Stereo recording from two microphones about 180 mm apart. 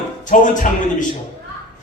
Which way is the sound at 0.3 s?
45° left (ahead or behind).